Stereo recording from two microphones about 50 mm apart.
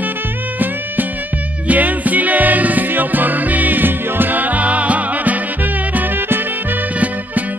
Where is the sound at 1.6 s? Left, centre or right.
Right.